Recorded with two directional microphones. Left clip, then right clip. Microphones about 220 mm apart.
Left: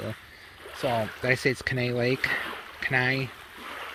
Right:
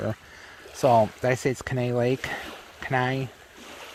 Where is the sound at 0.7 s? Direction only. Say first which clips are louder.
Right 8 dB; 40° right (ahead or behind).